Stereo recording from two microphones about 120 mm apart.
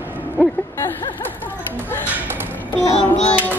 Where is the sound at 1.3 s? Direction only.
15° left (ahead or behind).